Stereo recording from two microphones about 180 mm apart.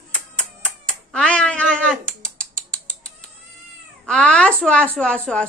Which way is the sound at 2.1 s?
5° left (ahead or behind).